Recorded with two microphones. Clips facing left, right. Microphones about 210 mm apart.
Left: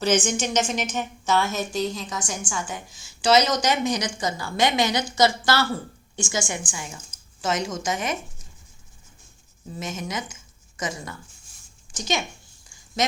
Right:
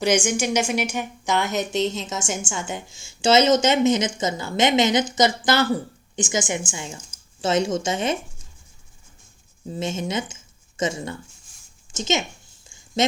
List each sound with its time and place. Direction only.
0.0 s a woman's voice: 10° right (ahead or behind); by 8.1 s 30° right (ahead or behind)
9.7 s a woman's voice: 25° right (ahead or behind)
12.6 s a sound: 25° right (ahead or behind)